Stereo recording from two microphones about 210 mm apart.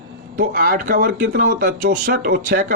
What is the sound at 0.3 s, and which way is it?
A man's voice, 40° right (ahead or behind).